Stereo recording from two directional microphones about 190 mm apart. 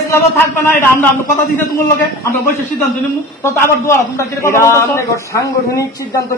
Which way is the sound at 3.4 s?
15° left (ahead or behind).